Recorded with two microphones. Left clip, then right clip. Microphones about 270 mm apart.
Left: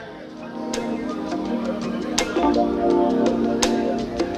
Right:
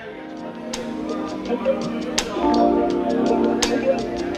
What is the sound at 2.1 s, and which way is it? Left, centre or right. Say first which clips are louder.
Music: even; centre.